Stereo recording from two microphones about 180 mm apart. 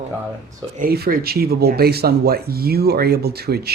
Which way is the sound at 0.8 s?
55° right (ahead or behind).